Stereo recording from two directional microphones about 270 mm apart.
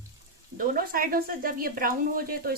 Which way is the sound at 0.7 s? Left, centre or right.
Right.